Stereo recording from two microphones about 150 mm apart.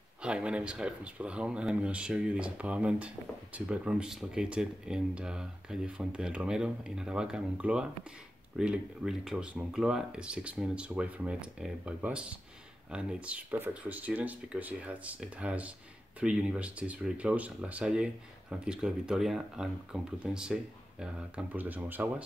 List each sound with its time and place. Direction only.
0.2 s speech: 5° right (ahead or behind)